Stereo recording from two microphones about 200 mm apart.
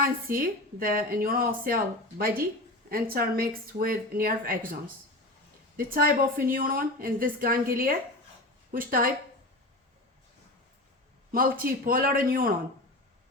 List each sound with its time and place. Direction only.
0.0 s a woman's voice: 45° right (ahead or behind)
11.3 s a woman's voice: 45° right (ahead or behind)